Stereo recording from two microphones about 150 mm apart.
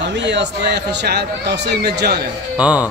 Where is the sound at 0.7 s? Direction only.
90° right.